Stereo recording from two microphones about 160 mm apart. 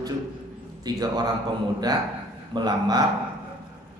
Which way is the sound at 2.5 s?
25° right (ahead or behind).